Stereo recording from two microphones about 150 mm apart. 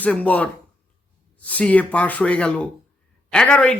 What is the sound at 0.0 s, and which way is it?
Speech, 10° left (ahead or behind).